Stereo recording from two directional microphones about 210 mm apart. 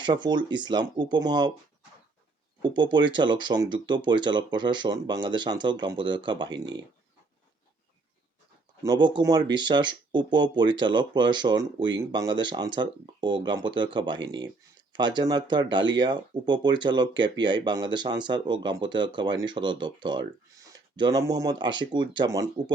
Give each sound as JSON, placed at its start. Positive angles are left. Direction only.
{"t": 0.0, "sound": "speech", "side_deg": -20}
{"t": 2.6, "sound": "speech", "side_deg": -20}
{"t": 8.8, "sound": "speech", "side_deg": -20}